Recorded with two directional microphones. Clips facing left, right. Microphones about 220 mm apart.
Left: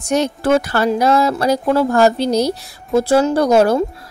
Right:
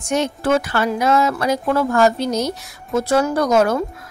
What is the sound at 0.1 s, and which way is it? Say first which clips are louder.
Speech: left 3 dB; 35° left (ahead or behind).